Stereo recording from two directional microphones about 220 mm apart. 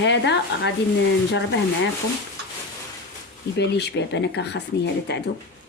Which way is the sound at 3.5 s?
50° left (ahead or behind).